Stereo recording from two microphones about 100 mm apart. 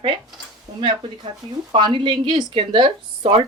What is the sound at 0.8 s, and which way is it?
Speech, 55° right (ahead or behind).